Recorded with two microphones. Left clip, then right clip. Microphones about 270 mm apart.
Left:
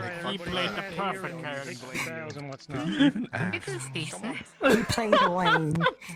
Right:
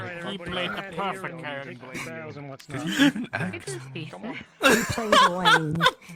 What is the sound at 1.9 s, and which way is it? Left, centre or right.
Speech, centre.